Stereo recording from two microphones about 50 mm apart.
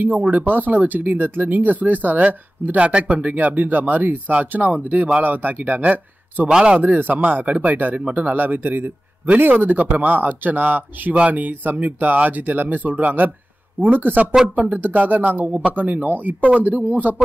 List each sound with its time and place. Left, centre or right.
0.1 s a man's voice: right
6.5 s speech: centre
6.8 s a man's voice: right